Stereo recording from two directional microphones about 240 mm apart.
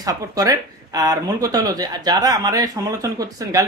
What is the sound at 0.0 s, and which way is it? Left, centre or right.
Speech, centre.